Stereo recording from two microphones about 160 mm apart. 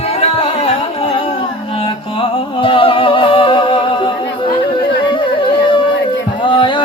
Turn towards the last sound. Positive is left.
turn(degrees=30)  # may be behind; listen again after turning